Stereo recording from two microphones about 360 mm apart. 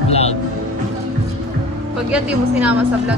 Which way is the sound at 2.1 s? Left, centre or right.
Centre.